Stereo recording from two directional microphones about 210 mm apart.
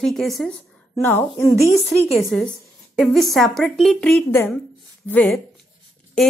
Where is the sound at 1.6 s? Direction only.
30° left (ahead or behind).